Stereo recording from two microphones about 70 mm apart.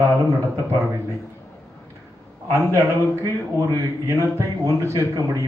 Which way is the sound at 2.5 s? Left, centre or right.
Right.